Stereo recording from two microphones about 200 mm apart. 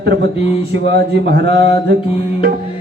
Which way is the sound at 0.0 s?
60° right (ahead or behind).